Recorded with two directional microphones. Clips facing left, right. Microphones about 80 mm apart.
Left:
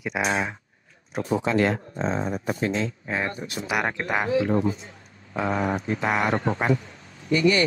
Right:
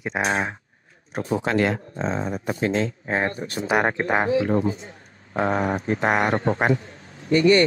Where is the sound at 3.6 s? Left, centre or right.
Right.